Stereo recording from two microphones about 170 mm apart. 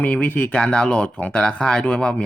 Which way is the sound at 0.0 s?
10° left (ahead or behind).